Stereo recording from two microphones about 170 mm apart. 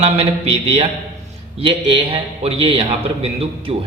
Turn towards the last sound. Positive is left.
turn(degrees=-35)  # may be behind; listen again after turning